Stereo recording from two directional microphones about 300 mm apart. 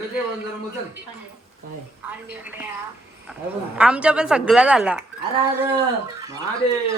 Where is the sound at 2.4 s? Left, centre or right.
Centre.